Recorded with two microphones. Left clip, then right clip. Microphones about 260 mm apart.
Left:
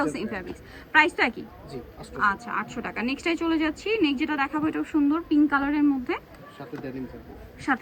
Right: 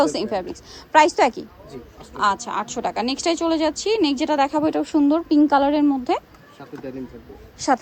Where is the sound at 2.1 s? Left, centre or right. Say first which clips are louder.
Right 4 dB; right.